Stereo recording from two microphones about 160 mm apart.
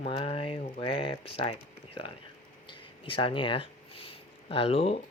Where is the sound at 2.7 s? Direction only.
30° left (ahead or behind).